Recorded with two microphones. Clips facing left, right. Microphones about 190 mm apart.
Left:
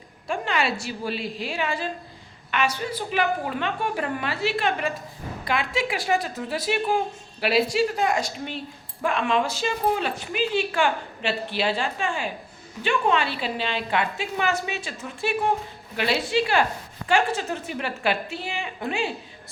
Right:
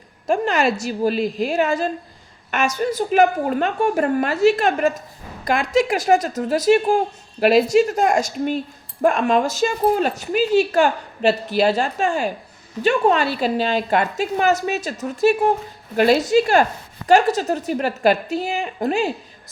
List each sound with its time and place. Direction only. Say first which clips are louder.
0.3 s a woman's voice: right 7 dB; 45° right (ahead or behind)